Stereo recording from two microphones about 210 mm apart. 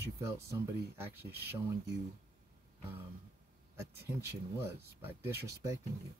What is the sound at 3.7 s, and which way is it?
Speech, 10° right (ahead or behind).